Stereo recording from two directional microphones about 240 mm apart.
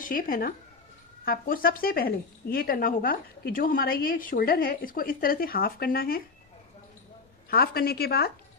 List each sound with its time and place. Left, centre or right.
0.0 s speech: left
7.5 s speech: left